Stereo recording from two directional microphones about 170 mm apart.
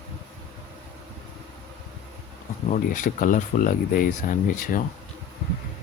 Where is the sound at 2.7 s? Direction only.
50° left (ahead or behind).